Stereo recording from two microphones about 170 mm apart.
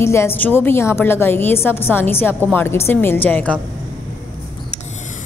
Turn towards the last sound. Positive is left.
turn(degrees=10)  # may be behind; listen again after turning